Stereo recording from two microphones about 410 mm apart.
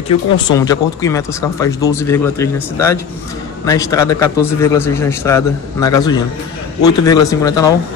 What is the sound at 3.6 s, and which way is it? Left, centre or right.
A man's voice, centre.